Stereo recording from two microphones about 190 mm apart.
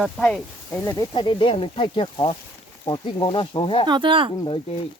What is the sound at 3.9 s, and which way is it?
Speech, 25° right (ahead or behind).